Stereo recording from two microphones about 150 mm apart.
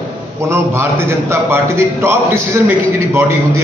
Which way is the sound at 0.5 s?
15° right (ahead or behind).